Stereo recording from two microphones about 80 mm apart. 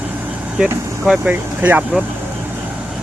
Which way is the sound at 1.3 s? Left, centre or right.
Right.